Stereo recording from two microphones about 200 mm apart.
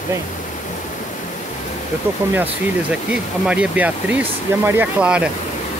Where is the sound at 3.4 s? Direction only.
5° right (ahead or behind).